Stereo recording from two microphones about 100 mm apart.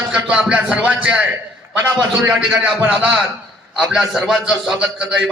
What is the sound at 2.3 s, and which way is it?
Speech, 5° right (ahead or behind).